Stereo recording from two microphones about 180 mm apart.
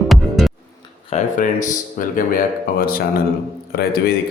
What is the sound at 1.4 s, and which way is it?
Speech, 45° left (ahead or behind).